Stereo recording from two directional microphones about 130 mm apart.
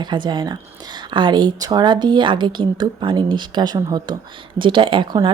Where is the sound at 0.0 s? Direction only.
35° right (ahead or behind).